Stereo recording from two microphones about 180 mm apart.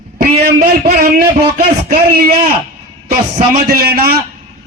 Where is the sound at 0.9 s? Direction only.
55° right (ahead or behind).